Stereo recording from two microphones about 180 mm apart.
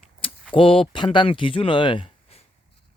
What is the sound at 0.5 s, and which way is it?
Speech, 30° left (ahead or behind).